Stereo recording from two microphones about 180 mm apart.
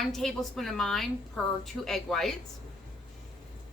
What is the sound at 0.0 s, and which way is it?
A woman's voice, centre (ahead or behind).